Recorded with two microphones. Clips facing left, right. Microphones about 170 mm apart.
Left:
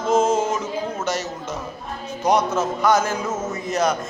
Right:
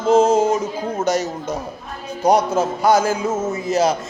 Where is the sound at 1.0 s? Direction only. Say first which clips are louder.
Right 9 dB; 15° right (ahead or behind).